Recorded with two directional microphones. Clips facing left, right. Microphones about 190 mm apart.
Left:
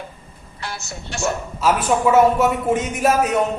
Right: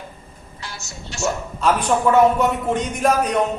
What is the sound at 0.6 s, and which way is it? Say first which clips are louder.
Speech: left 5 dB; 60° left (ahead or behind).